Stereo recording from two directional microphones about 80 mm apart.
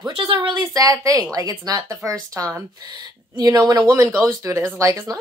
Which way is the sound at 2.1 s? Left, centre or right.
Right.